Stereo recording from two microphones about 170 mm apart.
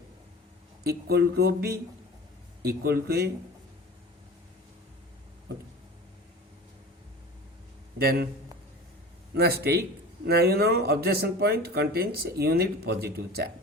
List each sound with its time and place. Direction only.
0.9 s speech: 65° right (ahead or behind)
7.9 s speech: 65° right (ahead or behind)
9.3 s speech: 70° right (ahead or behind)